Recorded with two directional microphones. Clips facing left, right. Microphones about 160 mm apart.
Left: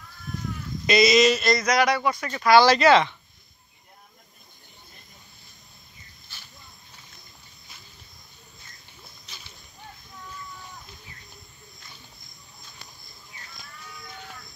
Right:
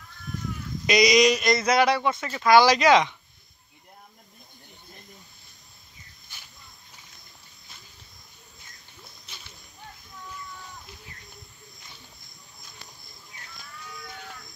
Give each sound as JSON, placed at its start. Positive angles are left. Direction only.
{"t": 0.8, "sound": "speech", "side_deg": -15}
{"t": 1.6, "sound": "speech", "side_deg": -30}
{"t": 2.4, "sound": "speech", "side_deg": -15}